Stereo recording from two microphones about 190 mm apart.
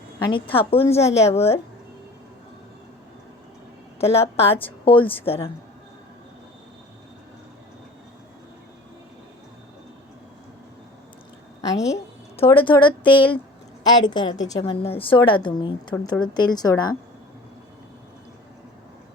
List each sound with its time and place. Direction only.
0.5 s a woman's voice: 30° left (ahead or behind)
4.0 s a woman's voice: 30° left (ahead or behind)
12.4 s a woman's voice: 25° left (ahead or behind)
14.6 s a woman's voice: 30° left (ahead or behind)